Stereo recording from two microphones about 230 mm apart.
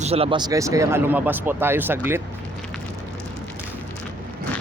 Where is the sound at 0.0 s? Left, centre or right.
Right; by 2.2 s centre.